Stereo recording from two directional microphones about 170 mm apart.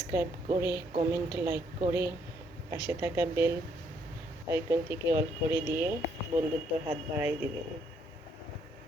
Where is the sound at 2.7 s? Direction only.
15° right (ahead or behind).